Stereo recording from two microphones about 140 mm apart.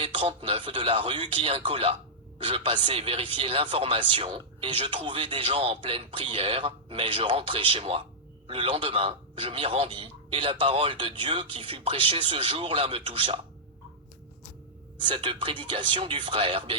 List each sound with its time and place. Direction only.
0.0 s speech: 35° right (ahead or behind)
15.0 s speech: 35° right (ahead or behind)